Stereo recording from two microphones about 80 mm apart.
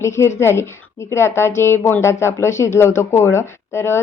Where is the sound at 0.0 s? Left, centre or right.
Left.